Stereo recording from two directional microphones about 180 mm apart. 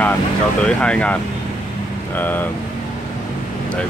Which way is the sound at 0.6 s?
5° left (ahead or behind).